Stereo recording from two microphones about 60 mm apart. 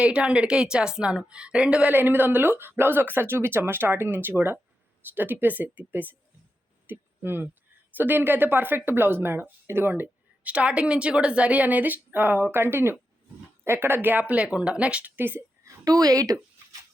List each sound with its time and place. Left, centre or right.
0.0 s a woman's voice: centre
1.9 s speech: right
6.8 s a sound: right
7.9 s speech: right
10.5 s a woman's voice: centre
15.1 s speech: right
15.6 s speech: right